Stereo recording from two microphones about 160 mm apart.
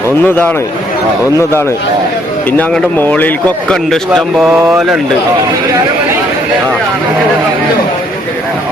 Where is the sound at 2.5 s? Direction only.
5° left (ahead or behind).